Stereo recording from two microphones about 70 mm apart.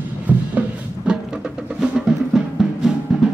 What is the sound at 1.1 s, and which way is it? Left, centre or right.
Music, centre.